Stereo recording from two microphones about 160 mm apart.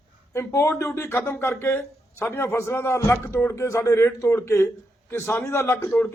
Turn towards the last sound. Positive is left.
turn(degrees=15)  # may be behind; listen again after turning